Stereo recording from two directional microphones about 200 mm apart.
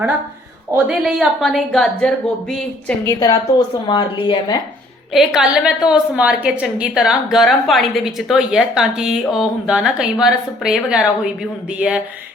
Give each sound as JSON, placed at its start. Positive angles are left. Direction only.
{"t": 0.7, "sound": "a woman's voice", "side_deg": -5}
{"t": 3.1, "sound": "a woman's voice", "side_deg": 20}
{"t": 5.1, "sound": "a woman's voice", "side_deg": 0}